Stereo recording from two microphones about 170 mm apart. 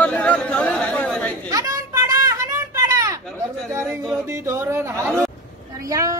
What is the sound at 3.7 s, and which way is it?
A woman's voice, 15° right (ahead or behind).